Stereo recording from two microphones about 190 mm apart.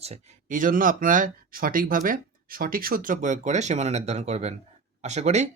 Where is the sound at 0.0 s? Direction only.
35° right (ahead or behind).